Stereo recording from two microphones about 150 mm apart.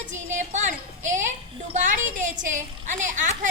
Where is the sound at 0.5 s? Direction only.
55° right (ahead or behind).